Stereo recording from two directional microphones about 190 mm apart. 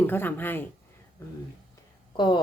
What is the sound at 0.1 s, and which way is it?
Speech, 10° left (ahead or behind).